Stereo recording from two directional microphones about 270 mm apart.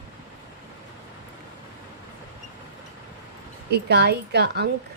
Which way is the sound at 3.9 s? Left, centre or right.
Right.